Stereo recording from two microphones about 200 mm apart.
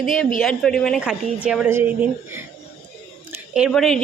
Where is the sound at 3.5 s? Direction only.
Centre (ahead or behind).